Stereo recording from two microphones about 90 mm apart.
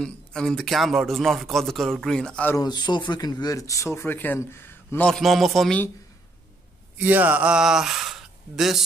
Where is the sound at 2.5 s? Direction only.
50° left (ahead or behind); by 4.4 s 25° left (ahead or behind).